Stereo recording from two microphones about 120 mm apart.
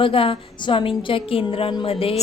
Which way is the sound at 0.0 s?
50° left (ahead or behind).